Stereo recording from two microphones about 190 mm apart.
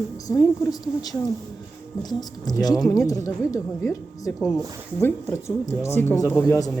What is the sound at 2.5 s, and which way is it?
A woman's voice, 20° left (ahead or behind).